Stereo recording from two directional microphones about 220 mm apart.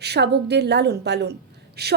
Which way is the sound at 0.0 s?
50° right (ahead or behind).